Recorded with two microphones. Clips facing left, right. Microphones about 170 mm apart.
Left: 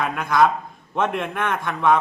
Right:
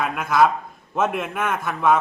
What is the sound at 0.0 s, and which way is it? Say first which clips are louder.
A man's voice: even; 5° right (ahead or behind).